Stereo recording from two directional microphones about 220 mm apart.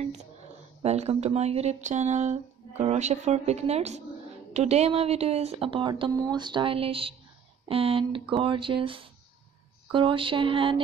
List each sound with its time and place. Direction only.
0.8 s speech: 30° right (ahead or behind)